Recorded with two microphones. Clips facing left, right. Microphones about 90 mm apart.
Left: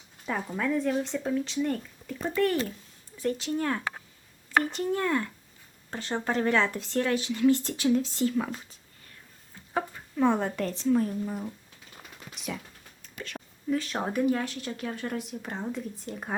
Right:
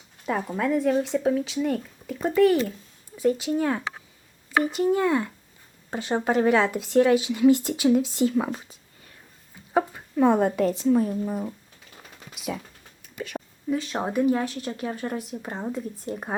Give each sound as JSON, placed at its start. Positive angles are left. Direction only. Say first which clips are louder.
{"t": 0.4, "sound": "speech", "louder": "right 4 dB", "side_deg": -10}
{"t": 9.7, "sound": "speech", "louder": "right 7 dB", "side_deg": -20}
{"t": 12.3, "sound": "a sound", "louder": "right 5 dB", "side_deg": -5}
{"t": 13.0, "sound": "speech", "louder": "right 7 dB", "side_deg": -10}